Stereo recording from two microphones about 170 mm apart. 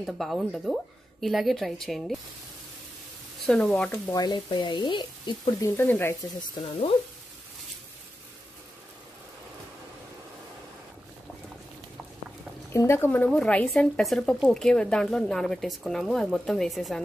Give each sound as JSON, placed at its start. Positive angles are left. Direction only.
{"t": 0.0, "sound": "speech", "side_deg": 0}
{"t": 3.4, "sound": "speech", "side_deg": 5}
{"t": 4.1, "sound": "speech", "side_deg": 25}
{"t": 12.6, "sound": "speech", "side_deg": 15}